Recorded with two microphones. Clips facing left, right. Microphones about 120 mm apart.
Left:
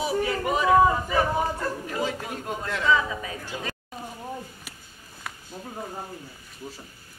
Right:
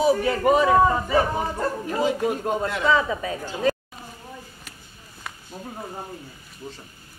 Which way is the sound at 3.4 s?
40° right (ahead or behind).